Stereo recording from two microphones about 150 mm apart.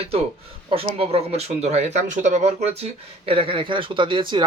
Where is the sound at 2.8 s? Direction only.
40° right (ahead or behind).